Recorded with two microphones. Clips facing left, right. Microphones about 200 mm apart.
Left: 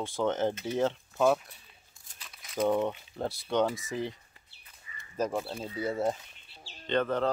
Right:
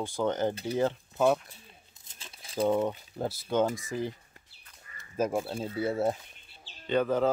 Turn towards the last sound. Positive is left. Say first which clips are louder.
# right 2 dB
turn(degrees=-5)  # may be behind; listen again after turning